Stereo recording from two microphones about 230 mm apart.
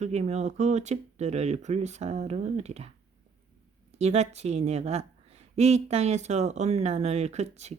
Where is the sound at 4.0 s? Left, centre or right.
Right.